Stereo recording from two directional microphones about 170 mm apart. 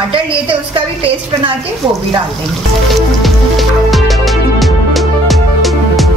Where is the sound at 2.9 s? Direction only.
Centre (ahead or behind).